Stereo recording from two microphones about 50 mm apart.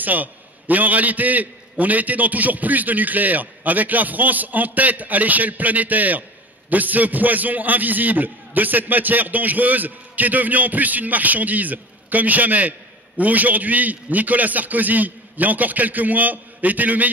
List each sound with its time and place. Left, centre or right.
0.0 s a man's voice: right